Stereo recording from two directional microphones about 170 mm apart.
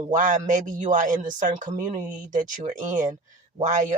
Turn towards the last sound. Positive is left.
turn(degrees=-45)  # may be behind; listen again after turning